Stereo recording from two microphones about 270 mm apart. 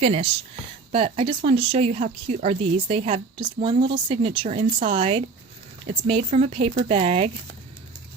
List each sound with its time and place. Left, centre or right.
0.0 s a woman's voice: right